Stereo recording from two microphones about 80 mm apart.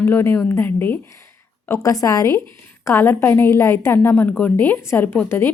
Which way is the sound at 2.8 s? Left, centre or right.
Left.